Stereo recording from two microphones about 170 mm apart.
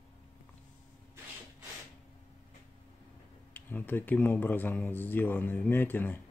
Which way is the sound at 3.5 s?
10° left (ahead or behind).